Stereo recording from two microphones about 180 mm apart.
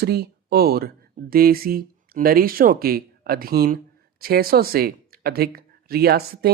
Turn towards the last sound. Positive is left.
turn(degrees=-60)  # may be behind; listen again after turning